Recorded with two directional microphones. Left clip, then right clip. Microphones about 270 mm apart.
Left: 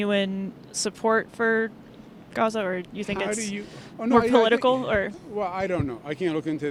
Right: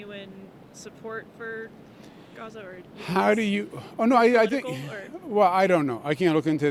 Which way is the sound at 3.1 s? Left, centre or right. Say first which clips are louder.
Right 7 dB; right.